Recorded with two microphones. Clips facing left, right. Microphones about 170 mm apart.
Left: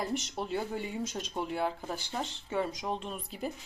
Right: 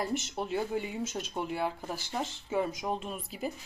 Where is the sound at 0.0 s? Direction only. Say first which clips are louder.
Right 1 dB; 5° right (ahead or behind).